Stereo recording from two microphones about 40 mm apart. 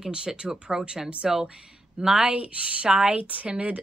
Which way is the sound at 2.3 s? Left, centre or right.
Right.